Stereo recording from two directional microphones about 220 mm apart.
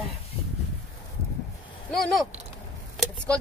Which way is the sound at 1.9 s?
Centre (ahead or behind).